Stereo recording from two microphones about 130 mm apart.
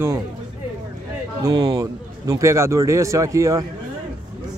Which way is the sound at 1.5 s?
30° right (ahead or behind).